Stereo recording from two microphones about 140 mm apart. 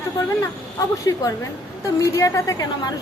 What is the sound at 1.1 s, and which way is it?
A woman's voice, 25° left (ahead or behind).